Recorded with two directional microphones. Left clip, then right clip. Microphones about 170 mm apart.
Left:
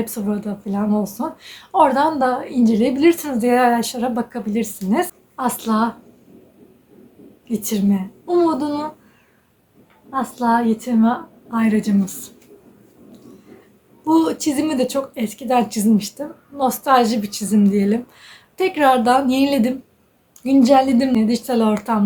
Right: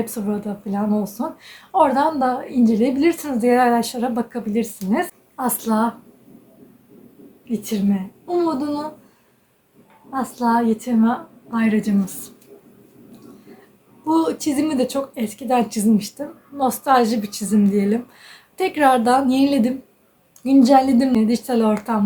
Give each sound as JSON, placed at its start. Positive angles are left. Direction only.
{"t": 0.0, "sound": "speech", "side_deg": 10}
{"t": 7.5, "sound": "speech", "side_deg": 20}
{"t": 10.1, "sound": "speech", "side_deg": 10}
{"t": 14.0, "sound": "speech", "side_deg": 10}